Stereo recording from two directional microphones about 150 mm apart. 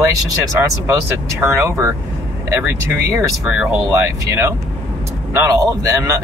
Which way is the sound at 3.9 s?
20° right (ahead or behind).